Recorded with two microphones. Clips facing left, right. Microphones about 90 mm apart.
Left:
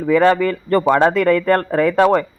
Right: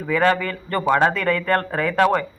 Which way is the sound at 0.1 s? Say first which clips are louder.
Left 5 dB; 25° left (ahead or behind).